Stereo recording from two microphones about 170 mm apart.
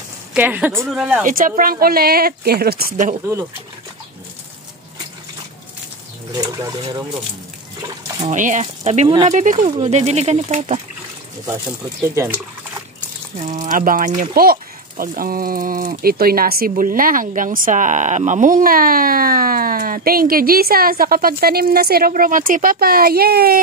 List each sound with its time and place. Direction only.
0.3 s speech: 10° right (ahead or behind)
1.2 s speech: 55° right (ahead or behind)
6.3 s speech: 25° right (ahead or behind)
8.3 s speech: 45° right (ahead or behind)
13.4 s speech: 50° right (ahead or behind); by 23.6 s 65° right (ahead or behind)